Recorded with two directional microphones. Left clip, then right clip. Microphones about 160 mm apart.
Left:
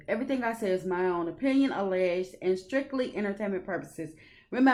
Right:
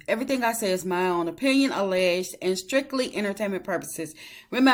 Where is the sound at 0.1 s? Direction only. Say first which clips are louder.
Right 5 dB; 15° right (ahead or behind).